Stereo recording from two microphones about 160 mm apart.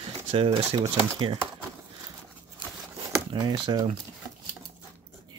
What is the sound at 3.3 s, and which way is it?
Speech, 25° right (ahead or behind).